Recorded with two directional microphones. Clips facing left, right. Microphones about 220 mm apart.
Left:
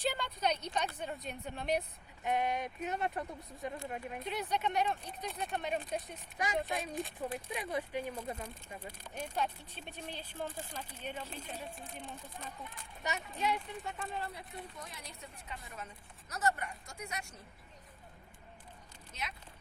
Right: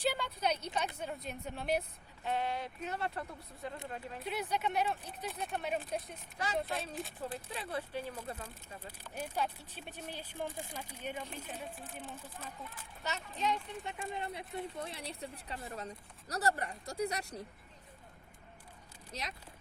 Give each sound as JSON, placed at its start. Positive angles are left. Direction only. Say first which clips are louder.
{"t": 0.0, "sound": "a sound", "louder": "right 1 dB", "side_deg": -5}
{"t": 0.9, "sound": "speech", "louder": "even", "side_deg": -5}
{"t": 2.2, "sound": "speech", "louder": "left 2 dB", "side_deg": 15}
{"t": 4.2, "sound": "speech", "louder": "even", "side_deg": -5}
{"t": 6.7, "sound": "speech", "louder": "left 2 dB", "side_deg": 15}
{"t": 9.1, "sound": "speech", "louder": "even", "side_deg": -5}
{"t": 13.0, "sound": "speech", "louder": "left 1 dB", "side_deg": 15}
{"t": 14.2, "sound": "speech", "louder": "right 3 dB", "side_deg": -25}
{"t": 19.1, "sound": "speech", "louder": "right 1 dB", "side_deg": -35}